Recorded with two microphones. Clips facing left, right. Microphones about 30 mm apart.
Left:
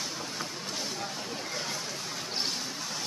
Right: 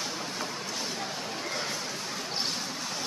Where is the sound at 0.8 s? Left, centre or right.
Centre.